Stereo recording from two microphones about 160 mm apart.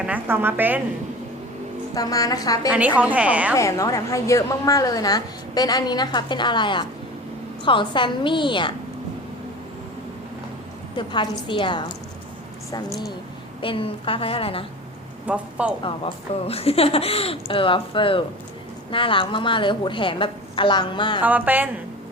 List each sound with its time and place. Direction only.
0.0 s a woman's voice: 10° right (ahead or behind)
2.0 s a woman's voice: 20° left (ahead or behind)
2.6 s a woman's voice: 10° right (ahead or behind)
3.5 s a woman's voice: 20° left (ahead or behind)
10.9 s speech: 30° left (ahead or behind)
13.6 s speech: 35° left (ahead or behind)
15.3 s a woman's voice: 10° right (ahead or behind)
15.8 s speech: 35° left (ahead or behind)
21.2 s a woman's voice: 10° right (ahead or behind)